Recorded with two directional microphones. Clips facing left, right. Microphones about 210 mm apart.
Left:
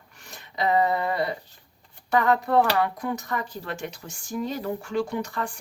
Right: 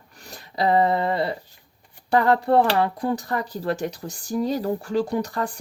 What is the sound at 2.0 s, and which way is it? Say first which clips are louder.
Speech: right 3 dB; 30° right (ahead or behind).